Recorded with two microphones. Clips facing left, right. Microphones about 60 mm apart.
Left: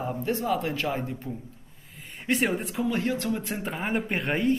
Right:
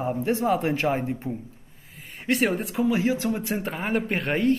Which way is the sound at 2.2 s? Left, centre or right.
Centre.